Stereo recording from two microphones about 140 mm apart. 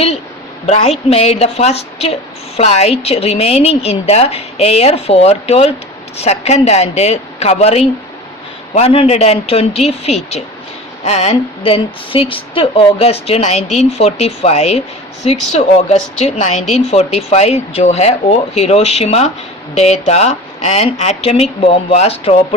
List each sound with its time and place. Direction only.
0.6 s a woman's voice: 45° left (ahead or behind)